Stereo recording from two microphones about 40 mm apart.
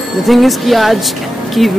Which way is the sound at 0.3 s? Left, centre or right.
Centre.